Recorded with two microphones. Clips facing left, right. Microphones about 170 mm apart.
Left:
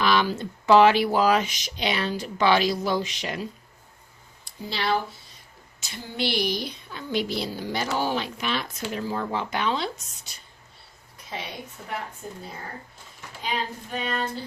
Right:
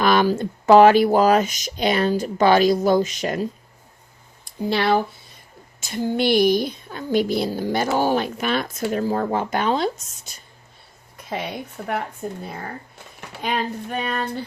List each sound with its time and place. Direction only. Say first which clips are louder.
0.0 s a woman's voice: right 5 dB; 50° right (ahead or behind)
4.4 s a woman's voice: right 7 dB; 55° right (ahead or behind)
11.8 s a sound: right 8 dB; 60° right (ahead or behind)